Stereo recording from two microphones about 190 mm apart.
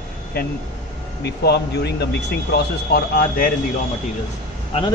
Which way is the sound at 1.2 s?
60° left (ahead or behind).